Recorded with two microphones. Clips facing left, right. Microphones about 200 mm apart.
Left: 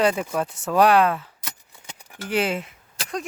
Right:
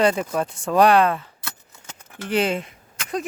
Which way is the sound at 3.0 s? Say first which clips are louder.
Even; 35° left (ahead or behind).